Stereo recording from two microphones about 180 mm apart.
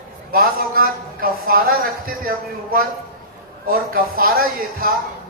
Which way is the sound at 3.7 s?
55° right (ahead or behind).